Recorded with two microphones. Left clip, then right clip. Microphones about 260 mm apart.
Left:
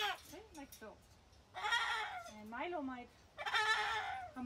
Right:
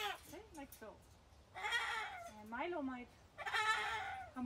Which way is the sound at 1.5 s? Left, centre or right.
Centre.